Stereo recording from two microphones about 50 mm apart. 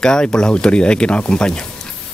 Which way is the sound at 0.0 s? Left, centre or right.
Centre.